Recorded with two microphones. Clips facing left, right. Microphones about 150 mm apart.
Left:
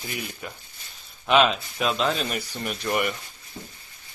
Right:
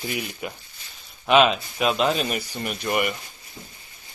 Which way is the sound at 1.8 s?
15° right (ahead or behind).